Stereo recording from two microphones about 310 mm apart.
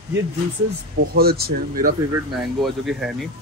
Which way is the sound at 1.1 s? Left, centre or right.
Right.